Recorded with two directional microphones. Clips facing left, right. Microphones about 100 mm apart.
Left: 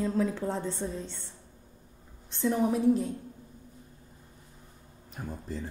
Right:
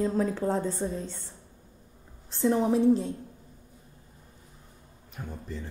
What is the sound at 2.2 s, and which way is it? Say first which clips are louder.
Speech: right 3 dB; 30° right (ahead or behind).